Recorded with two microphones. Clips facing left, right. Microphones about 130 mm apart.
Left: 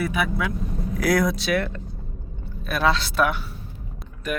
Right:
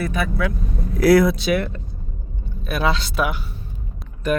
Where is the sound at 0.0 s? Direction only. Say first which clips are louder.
Right 1 dB; 10° left (ahead or behind).